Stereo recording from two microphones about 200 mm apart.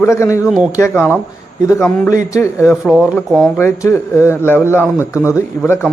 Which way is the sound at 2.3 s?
15° left (ahead or behind).